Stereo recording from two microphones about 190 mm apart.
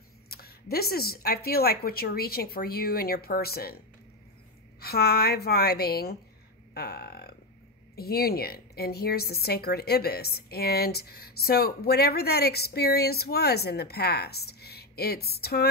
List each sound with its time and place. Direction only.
0.3 s a woman's voice: 55° left (ahead or behind)